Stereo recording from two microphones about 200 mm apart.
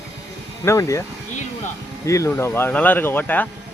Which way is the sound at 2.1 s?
15° left (ahead or behind).